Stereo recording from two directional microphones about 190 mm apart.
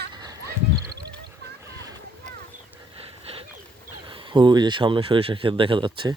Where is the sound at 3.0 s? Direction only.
30° right (ahead or behind).